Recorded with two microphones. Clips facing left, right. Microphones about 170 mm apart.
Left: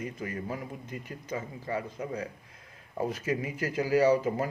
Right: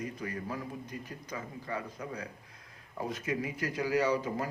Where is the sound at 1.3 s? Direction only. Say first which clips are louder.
Left 5 dB; 30° left (ahead or behind).